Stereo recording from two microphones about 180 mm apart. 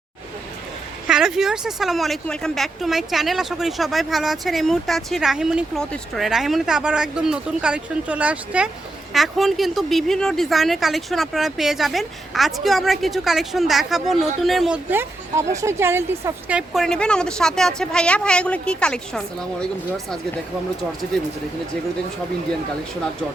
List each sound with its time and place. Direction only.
1.0 s a woman's voice: 5° right (ahead or behind)